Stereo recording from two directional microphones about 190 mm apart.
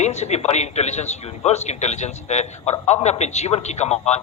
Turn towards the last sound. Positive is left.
turn(degrees=35)  # may be behind; listen again after turning